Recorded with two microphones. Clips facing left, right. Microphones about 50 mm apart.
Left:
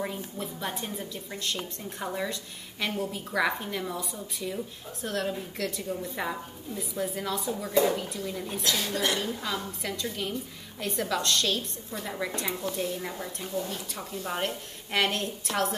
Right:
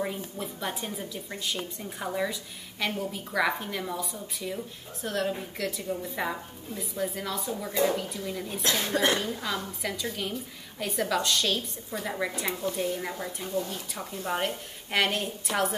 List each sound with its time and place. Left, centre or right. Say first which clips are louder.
0.0 s speech: right 1 dB; centre
8.6 s speech: right 1 dB; right
9.2 s speech: even; centre